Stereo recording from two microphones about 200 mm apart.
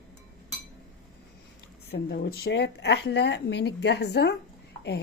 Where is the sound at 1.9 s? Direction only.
50° left (ahead or behind).